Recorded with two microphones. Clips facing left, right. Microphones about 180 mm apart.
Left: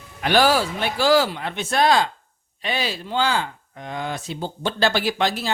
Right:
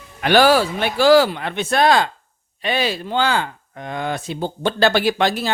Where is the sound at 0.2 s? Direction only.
70° right (ahead or behind).